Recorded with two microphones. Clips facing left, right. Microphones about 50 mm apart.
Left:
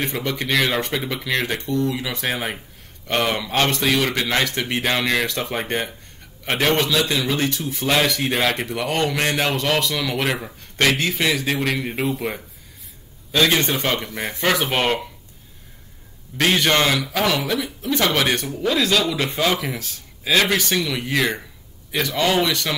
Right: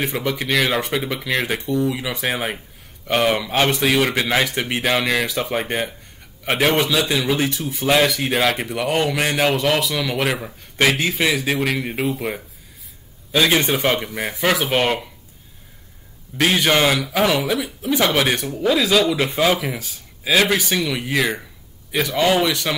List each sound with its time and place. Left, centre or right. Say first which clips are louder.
0.0 s a man's voice: right 2 dB; centre
16.3 s a man's voice: right 1 dB; centre